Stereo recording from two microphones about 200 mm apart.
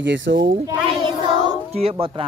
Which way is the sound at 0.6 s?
15° right (ahead or behind).